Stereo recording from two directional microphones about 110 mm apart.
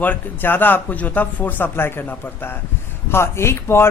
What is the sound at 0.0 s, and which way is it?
Speech, 15° left (ahead or behind).